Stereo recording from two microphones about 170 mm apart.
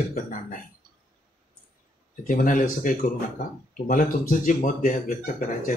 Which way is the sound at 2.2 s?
55° left (ahead or behind).